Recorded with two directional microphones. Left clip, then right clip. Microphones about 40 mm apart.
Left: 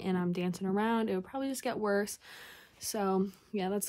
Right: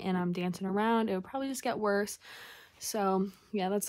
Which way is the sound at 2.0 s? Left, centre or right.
Left.